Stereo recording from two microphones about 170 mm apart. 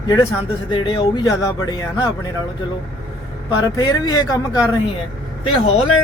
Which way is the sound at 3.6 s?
25° left (ahead or behind).